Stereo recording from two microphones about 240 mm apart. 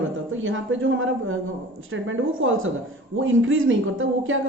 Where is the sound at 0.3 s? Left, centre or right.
Right.